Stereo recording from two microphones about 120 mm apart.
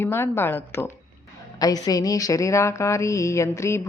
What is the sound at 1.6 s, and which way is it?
A woman's voice, 30° left (ahead or behind).